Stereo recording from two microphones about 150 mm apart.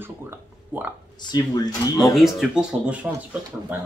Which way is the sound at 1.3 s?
25° left (ahead or behind).